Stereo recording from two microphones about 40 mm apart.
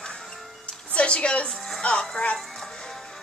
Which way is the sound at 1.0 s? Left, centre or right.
Left.